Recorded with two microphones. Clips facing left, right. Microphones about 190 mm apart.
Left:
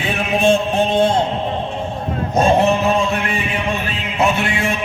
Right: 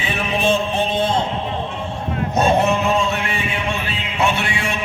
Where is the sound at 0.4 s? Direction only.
45° left (ahead or behind).